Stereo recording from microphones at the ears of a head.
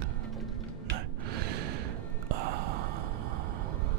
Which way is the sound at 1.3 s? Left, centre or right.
Right.